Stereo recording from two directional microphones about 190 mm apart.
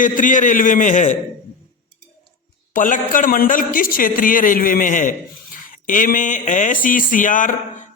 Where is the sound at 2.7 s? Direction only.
45° left (ahead or behind).